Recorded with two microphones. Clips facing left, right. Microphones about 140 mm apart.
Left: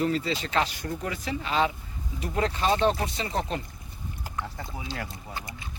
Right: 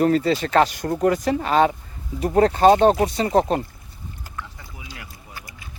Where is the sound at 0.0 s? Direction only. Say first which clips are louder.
Right 8 dB; 50° right (ahead or behind).